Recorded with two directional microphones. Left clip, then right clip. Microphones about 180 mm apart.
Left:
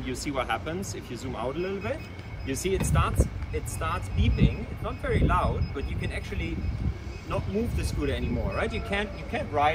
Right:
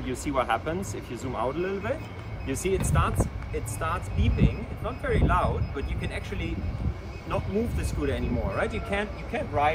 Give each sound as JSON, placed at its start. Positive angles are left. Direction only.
{"t": 0.0, "sound": "speech", "side_deg": -20}